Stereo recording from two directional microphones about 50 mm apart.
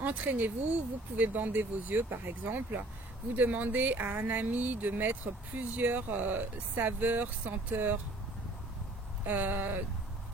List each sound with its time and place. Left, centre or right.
0.0 s speech: right
9.2 s speech: right